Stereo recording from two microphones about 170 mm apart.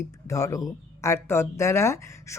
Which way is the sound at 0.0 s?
20° left (ahead or behind).